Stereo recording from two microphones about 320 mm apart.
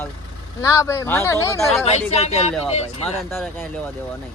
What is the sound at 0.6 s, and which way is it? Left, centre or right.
Speech, centre.